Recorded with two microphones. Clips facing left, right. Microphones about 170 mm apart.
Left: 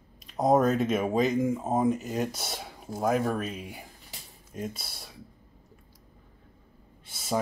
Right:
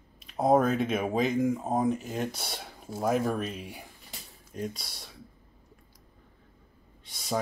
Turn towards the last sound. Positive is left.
turn(degrees=5)  # may be behind; listen again after turning